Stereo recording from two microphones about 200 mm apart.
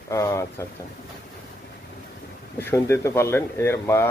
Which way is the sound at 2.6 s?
10° left (ahead or behind).